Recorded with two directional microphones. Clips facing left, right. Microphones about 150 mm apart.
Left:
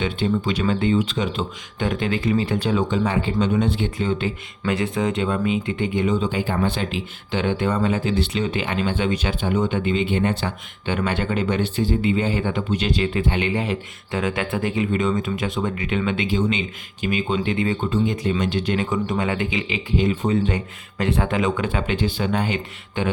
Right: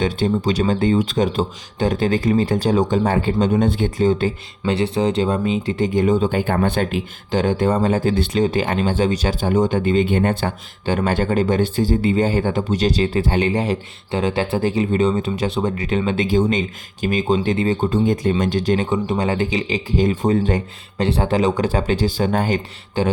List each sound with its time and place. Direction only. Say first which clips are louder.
0.0 s speech: right 3 dB; 35° right (ahead or behind)